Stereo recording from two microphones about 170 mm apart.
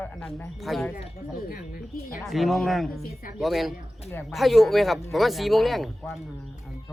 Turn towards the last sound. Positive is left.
turn(degrees=0)  # may be behind; listen again after turning